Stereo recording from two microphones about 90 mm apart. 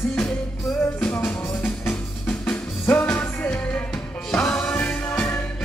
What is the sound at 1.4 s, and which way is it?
Music, 30° left (ahead or behind).